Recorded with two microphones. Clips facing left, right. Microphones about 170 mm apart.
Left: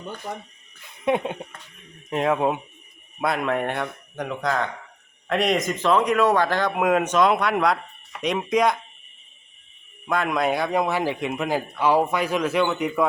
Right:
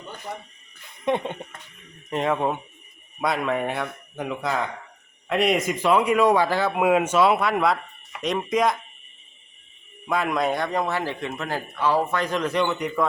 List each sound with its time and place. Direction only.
0.8 s a man's voice: 5° left (ahead or behind)
10.1 s speech: centre (ahead or behind)